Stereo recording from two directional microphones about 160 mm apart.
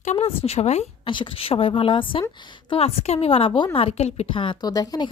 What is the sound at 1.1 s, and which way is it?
A woman's voice, 30° left (ahead or behind).